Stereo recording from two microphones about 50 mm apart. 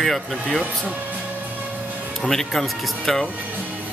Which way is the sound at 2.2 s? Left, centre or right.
Centre.